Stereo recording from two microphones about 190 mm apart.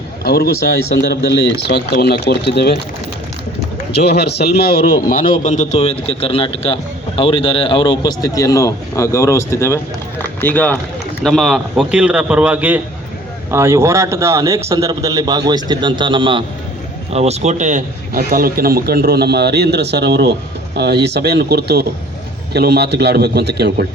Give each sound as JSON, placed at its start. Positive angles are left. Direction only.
{"t": 0.3, "sound": "speech", "side_deg": 55}
{"t": 3.9, "sound": "a man's voice", "side_deg": 60}